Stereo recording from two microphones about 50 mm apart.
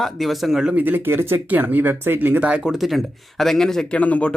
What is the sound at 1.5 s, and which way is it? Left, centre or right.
Speech, right.